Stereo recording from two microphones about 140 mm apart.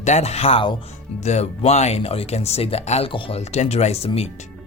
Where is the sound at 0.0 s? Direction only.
55° left (ahead or behind).